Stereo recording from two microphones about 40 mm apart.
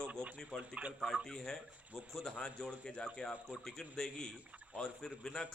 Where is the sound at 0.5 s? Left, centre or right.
Left.